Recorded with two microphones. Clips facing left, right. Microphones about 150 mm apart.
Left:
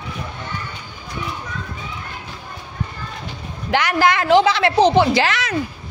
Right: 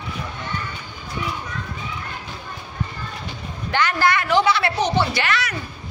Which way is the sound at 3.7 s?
85° left.